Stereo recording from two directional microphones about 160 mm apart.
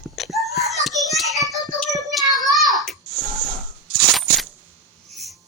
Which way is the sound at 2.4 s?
Centre (ahead or behind).